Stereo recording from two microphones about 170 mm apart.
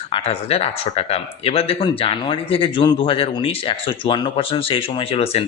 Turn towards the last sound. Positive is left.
turn(degrees=35)  # may be behind; listen again after turning